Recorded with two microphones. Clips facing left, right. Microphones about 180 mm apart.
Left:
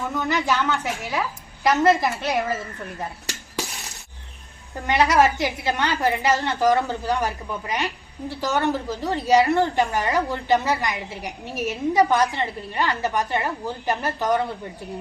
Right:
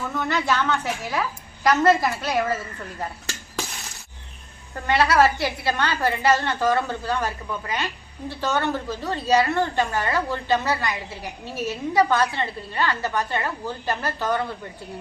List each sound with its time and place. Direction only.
0.0 s a woman's voice: 15° left (ahead or behind)
4.7 s a woman's voice: 15° left (ahead or behind)